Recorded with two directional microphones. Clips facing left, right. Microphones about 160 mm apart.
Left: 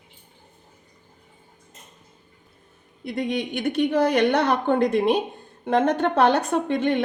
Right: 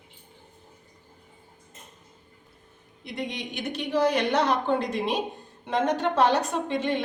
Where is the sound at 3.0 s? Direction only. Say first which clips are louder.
Left 7 dB; 55° left (ahead or behind).